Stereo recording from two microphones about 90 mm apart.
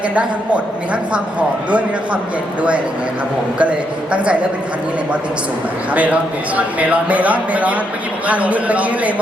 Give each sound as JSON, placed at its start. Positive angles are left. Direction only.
{"t": 0.1, "sound": "speech", "side_deg": -15}
{"t": 5.9, "sound": "speech", "side_deg": -15}